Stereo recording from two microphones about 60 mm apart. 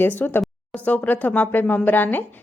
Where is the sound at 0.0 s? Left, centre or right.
Left.